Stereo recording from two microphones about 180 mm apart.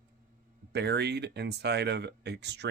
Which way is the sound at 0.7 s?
65° right (ahead or behind).